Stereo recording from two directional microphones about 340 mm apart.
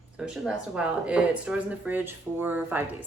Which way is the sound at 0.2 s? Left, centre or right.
Centre.